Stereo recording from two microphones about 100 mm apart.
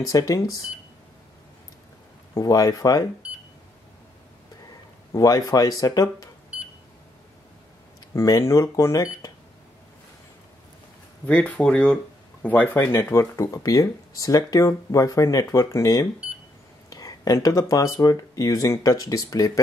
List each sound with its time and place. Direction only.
0.0 s speech: 35° left (ahead or behind)
2.3 s speech: 35° left (ahead or behind)
5.1 s speech: 35° left (ahead or behind)
8.1 s speech: 35° left (ahead or behind)
11.2 s speech: 15° left (ahead or behind); by 19.6 s 35° left (ahead or behind)